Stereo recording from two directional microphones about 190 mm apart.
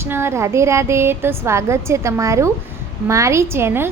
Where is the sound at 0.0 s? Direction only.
15° right (ahead or behind).